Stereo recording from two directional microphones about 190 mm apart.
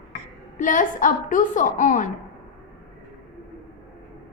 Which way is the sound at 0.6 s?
45° left (ahead or behind).